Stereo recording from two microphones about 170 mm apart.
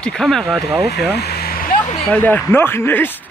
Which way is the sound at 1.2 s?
65° left (ahead or behind).